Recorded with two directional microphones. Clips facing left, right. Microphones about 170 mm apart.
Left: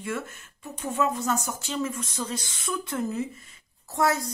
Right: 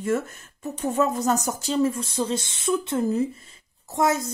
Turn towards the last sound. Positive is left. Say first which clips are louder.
# right 2 dB
turn(degrees=-20)  # may be behind; listen again after turning